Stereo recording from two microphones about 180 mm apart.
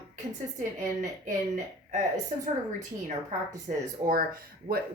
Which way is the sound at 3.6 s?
50° right (ahead or behind).